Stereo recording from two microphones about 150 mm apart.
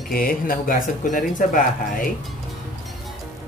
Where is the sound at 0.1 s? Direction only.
75° left (ahead or behind).